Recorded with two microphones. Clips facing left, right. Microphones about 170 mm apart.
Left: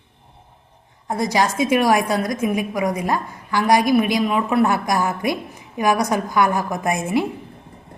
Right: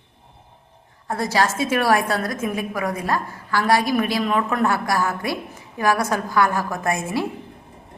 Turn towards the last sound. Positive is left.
turn(degrees=20)  # may be behind; listen again after turning